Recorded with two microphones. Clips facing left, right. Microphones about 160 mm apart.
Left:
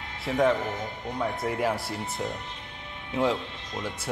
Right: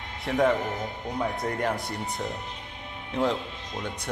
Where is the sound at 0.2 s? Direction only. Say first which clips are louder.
Even; centre (ahead or behind).